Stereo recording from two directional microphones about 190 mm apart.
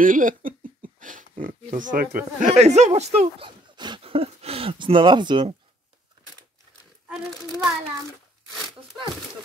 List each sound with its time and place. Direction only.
0.0 s speech: 45° right (ahead or behind); by 5.5 s 25° right (ahead or behind)